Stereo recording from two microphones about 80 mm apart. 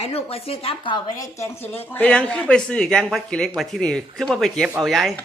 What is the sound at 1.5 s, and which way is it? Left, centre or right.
Speech, left.